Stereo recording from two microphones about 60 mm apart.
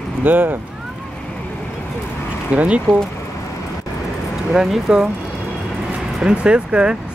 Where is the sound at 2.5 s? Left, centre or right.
Right.